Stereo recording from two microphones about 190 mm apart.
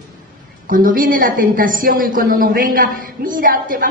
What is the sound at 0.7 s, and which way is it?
A woman's voice, 45° right (ahead or behind).